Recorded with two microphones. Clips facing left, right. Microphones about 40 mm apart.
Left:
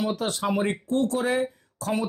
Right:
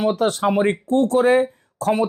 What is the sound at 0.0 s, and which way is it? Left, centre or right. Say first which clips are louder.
Speech: right 8 dB; right.